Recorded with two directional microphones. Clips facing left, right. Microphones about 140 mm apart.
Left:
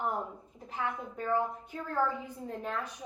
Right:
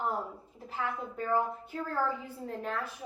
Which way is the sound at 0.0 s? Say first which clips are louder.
Even; 20° left (ahead or behind).